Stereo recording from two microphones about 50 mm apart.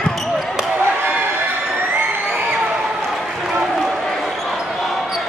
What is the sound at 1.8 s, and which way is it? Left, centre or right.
Crowd, right.